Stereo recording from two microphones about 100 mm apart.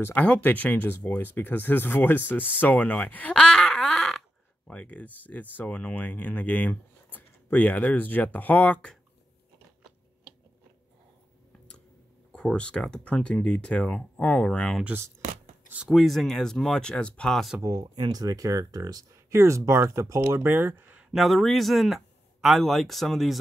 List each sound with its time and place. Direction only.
0.0 s speech: 15° left (ahead or behind)
12.3 s speech: 10° left (ahead or behind)
15.9 s speech: centre (ahead or behind)
17.6 s speech: 35° right (ahead or behind)
21.1 s speech: centre (ahead or behind)